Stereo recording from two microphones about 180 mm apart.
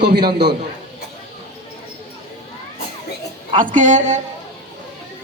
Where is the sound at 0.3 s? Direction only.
60° right (ahead or behind).